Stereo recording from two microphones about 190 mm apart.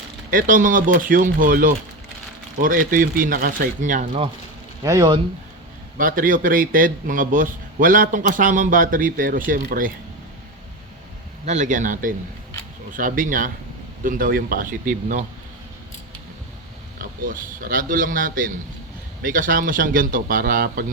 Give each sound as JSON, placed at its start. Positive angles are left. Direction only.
{"t": 0.3, "sound": "a man's voice", "side_deg": -45}
{"t": 4.8, "sound": "speech", "side_deg": -20}
{"t": 6.0, "sound": "a man's voice", "side_deg": -45}
{"t": 11.4, "sound": "a man's voice", "side_deg": -40}
{"t": 17.0, "sound": "a man's voice", "side_deg": -50}